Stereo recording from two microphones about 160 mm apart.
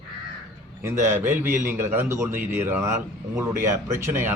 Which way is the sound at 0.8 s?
15° right (ahead or behind).